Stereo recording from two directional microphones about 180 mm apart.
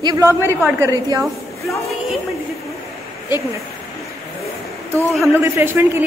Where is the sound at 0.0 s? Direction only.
20° right (ahead or behind).